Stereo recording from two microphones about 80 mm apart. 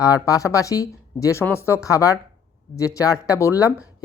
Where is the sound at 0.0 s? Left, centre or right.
Left.